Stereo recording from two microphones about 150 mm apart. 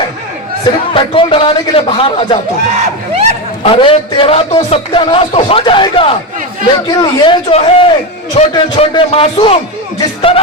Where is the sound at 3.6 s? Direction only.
35° left (ahead or behind).